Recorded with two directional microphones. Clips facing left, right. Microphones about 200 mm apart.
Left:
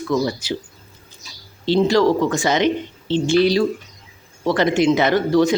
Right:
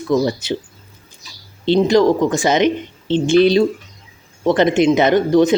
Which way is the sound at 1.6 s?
20° right (ahead or behind).